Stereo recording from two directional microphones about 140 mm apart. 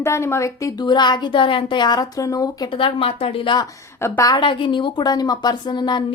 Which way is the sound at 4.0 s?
20° left (ahead or behind).